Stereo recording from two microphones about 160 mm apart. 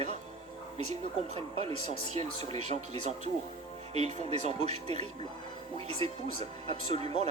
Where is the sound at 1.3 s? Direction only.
40° right (ahead or behind).